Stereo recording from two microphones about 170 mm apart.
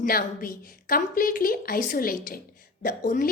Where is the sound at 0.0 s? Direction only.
60° left (ahead or behind).